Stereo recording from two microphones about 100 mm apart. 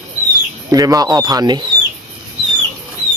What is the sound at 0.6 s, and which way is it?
Speech, 35° right (ahead or behind).